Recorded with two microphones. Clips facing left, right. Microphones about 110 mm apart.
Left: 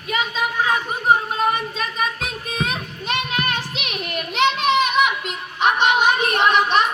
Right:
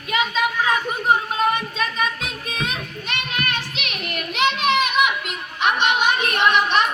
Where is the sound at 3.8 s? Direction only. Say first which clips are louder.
Left 2 dB; 30° left (ahead or behind).